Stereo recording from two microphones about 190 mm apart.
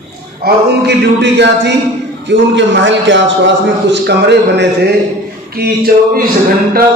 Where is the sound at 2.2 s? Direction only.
75° right (ahead or behind).